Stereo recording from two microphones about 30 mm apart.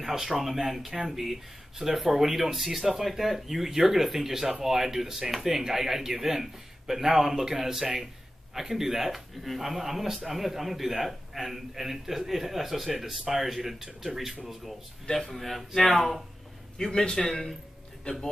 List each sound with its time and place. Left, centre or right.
0.0 s speech: centre
15.0 s speech: centre
16.7 s a man's voice: centre
18.1 s a man's voice: left